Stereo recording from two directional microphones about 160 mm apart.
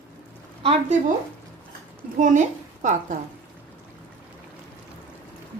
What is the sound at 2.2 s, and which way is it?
Speech, 50° right (ahead or behind).